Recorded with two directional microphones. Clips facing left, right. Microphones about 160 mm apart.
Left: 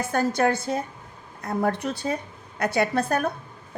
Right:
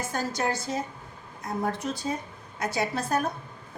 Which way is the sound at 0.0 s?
60° left (ahead or behind).